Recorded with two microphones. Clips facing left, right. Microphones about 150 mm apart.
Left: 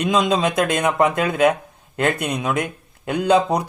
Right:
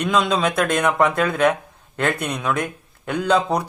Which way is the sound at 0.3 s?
20° left (ahead or behind).